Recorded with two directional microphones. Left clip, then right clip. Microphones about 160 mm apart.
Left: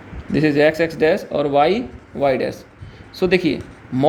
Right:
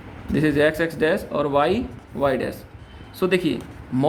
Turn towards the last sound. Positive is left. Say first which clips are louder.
# left 3 dB
turn(degrees=25)  # may be behind; listen again after turning